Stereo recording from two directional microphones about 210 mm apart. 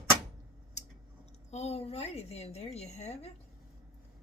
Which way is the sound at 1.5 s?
30° left (ahead or behind).